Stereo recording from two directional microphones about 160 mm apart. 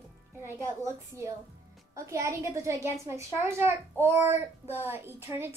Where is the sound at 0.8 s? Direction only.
15° right (ahead or behind).